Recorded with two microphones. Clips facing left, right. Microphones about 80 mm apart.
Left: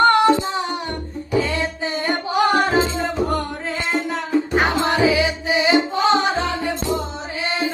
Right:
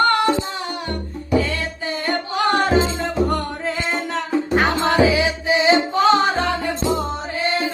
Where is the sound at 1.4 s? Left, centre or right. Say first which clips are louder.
Left 5 dB; left.